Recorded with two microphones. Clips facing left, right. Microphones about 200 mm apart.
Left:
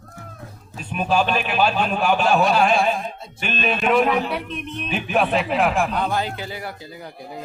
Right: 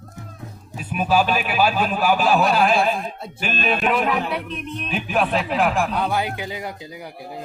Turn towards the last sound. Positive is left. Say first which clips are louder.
# right 1 dB
turn(degrees=-15)  # may be behind; listen again after turning